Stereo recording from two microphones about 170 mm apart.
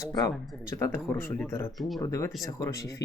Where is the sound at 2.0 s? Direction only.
20° left (ahead or behind).